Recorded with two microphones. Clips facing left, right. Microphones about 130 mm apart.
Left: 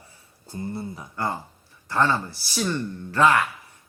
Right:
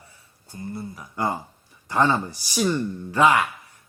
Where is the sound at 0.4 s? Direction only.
30° left (ahead or behind).